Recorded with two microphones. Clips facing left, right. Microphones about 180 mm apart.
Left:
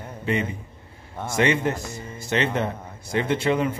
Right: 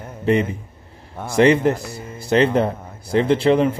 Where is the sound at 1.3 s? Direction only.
35° right (ahead or behind).